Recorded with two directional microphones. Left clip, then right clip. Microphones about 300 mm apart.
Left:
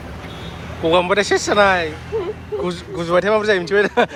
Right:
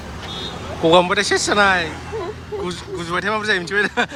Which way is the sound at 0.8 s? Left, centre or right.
Centre.